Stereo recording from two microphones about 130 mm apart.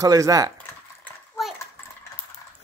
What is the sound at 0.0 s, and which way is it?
Speech, 25° right (ahead or behind).